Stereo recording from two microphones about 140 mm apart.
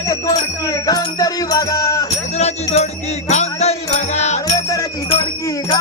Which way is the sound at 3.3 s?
50° left (ahead or behind).